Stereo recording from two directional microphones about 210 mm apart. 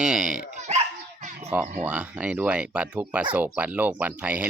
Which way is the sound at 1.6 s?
35° right (ahead or behind).